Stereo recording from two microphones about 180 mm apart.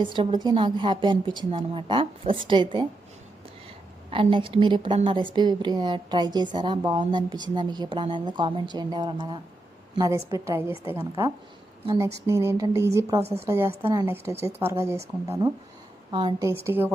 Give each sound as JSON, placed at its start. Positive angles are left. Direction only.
{"t": 0.0, "sound": "a woman's voice", "side_deg": -25}
{"t": 4.1, "sound": "a woman's voice", "side_deg": -30}
{"t": 16.6, "sound": "speech", "side_deg": -10}